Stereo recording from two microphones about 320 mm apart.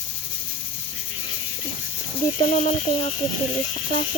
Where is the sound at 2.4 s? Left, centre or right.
Centre.